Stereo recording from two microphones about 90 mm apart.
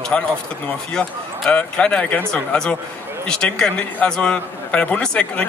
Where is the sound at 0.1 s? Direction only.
15° left (ahead or behind).